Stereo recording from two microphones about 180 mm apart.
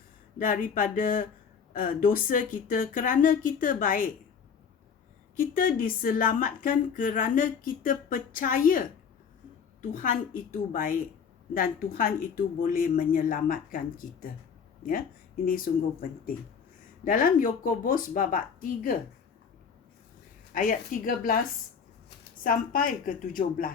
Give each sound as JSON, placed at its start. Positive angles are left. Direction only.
{"t": 0.3, "sound": "a woman's voice", "side_deg": 50}
{"t": 5.4, "sound": "a woman's voice", "side_deg": 50}
{"t": 9.9, "sound": "a woman's voice", "side_deg": 45}
{"t": 15.4, "sound": "a woman's voice", "side_deg": 50}
{"t": 20.5, "sound": "a woman's voice", "side_deg": 45}
{"t": 22.4, "sound": "a woman's voice", "side_deg": 50}